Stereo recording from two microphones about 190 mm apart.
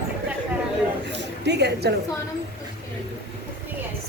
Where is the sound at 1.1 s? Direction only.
65° right (ahead or behind).